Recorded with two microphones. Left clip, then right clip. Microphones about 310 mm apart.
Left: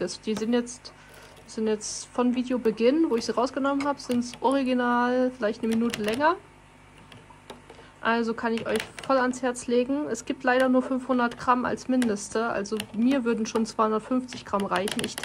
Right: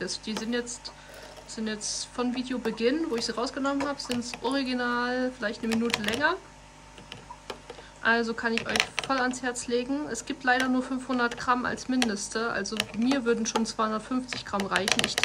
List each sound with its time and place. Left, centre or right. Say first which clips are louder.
0.0 s speech: left 4 dB; centre
5.7 s speech: left 1 dB; centre
8.0 s speech: even; centre